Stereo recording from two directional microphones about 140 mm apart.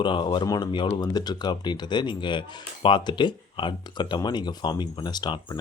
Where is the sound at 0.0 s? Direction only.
35° left (ahead or behind).